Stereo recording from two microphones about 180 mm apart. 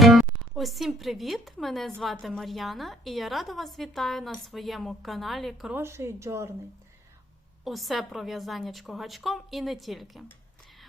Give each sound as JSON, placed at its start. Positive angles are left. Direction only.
{"t": 0.0, "sound": "a woman's voice", "side_deg": 0}
{"t": 5.7, "sound": "speech", "side_deg": -15}
{"t": 7.6, "sound": "a woman's voice", "side_deg": 0}